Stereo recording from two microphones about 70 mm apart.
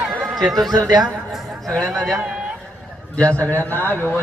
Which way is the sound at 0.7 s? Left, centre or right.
Right.